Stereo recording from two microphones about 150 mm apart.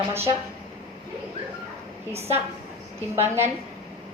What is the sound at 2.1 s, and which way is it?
Speech, 45° right (ahead or behind).